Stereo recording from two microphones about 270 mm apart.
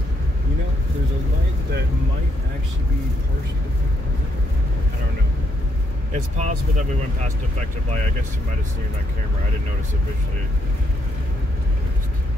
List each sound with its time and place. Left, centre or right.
6.1 s speech: right